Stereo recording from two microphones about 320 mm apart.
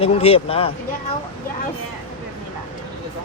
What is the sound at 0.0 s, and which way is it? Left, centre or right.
Speech, centre.